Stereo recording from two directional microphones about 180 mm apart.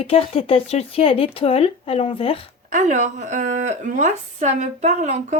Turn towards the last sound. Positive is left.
turn(degrees=-45)  # may be behind; listen again after turning